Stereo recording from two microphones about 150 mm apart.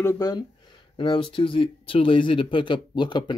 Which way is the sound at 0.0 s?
20° left (ahead or behind).